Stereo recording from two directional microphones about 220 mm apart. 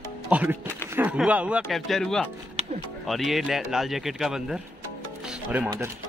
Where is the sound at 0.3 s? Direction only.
5° right (ahead or behind).